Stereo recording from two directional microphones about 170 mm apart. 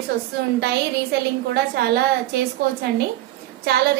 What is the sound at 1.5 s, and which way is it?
Speech, 70° right (ahead or behind).